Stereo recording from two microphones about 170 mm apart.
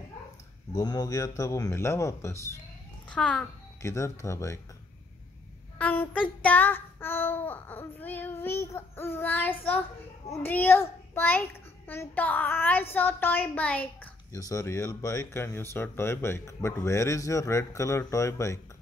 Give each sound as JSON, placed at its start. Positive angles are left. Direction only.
{"t": 0.7, "sound": "speech", "side_deg": 20}
{"t": 3.1, "sound": "a child's voice", "side_deg": 5}
{"t": 3.8, "sound": "speech", "side_deg": 15}
{"t": 5.8, "sound": "speech", "side_deg": 10}
{"t": 14.3, "sound": "speech", "side_deg": 20}